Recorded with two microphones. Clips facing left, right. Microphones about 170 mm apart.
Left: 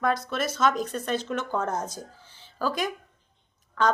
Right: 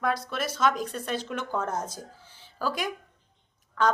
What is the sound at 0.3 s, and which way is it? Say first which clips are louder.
A woman's voice: left 1 dB; 10° right (ahead or behind).